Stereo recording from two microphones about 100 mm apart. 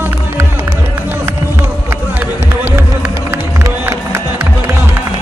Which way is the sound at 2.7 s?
25° right (ahead or behind).